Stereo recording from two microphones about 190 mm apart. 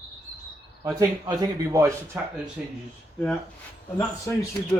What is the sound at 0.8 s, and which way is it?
Speech, 20° right (ahead or behind).